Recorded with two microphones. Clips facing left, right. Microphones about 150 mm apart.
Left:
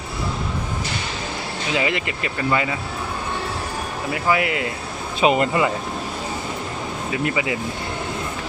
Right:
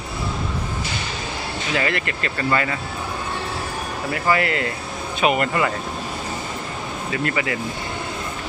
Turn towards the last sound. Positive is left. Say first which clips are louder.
# left 1 dB
turn(degrees=15)  # may be behind; listen again after turning